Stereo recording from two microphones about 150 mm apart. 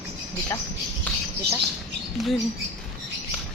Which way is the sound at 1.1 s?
10° left (ahead or behind).